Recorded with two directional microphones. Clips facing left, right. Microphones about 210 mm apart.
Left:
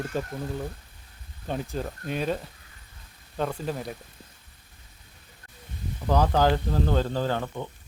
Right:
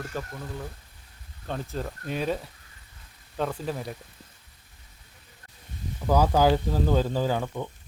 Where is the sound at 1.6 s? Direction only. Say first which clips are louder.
Left 1 dB; centre (ahead or behind).